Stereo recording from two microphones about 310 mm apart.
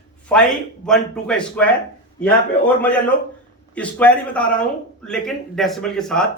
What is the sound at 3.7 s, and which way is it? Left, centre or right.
Speech, centre.